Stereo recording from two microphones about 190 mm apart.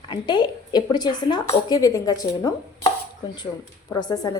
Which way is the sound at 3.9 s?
20° left (ahead or behind).